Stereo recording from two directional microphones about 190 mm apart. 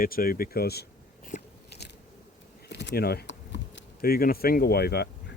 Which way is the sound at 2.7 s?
65° left (ahead or behind).